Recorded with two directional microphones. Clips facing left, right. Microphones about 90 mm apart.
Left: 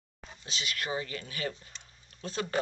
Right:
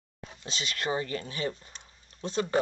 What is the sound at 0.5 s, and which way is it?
Speech, 25° right (ahead or behind).